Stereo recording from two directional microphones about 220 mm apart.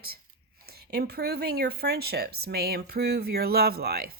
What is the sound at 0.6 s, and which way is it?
Speech, 45° right (ahead or behind).